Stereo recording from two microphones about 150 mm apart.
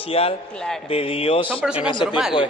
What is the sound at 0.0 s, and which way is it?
Speech, 40° left (ahead or behind).